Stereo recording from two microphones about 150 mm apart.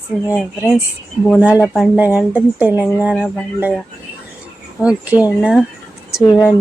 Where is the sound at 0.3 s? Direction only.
5° right (ahead or behind).